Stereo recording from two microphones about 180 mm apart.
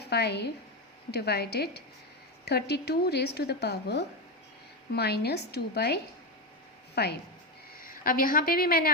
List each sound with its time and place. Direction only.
0.0 s a woman's voice: 65° left (ahead or behind)
7.9 s a woman's voice: 50° left (ahead or behind)